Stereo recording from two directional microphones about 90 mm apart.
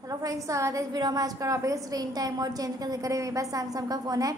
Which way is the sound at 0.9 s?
45° right (ahead or behind).